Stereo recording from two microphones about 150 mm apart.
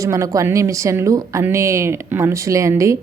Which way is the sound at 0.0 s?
20° right (ahead or behind).